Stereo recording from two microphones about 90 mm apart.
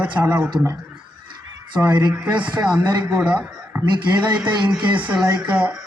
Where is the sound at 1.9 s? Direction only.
55° right (ahead or behind).